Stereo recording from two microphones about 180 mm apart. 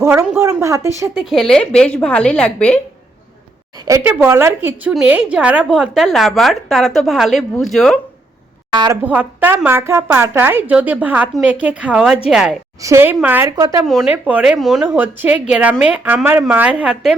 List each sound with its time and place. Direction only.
0.0 s speech: 10° right (ahead or behind)
1.2 s a woman's voice: centre (ahead or behind)
3.8 s a woman's voice: 15° right (ahead or behind); by 7.9 s centre (ahead or behind)
8.7 s a woman's voice: 25° right (ahead or behind)
9.0 s a woman's voice: 10° right (ahead or behind)
12.8 s speech: 15° right (ahead or behind)
13.8 s speech: centre (ahead or behind)